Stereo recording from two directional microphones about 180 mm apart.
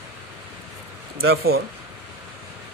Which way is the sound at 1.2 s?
60° right (ahead or behind).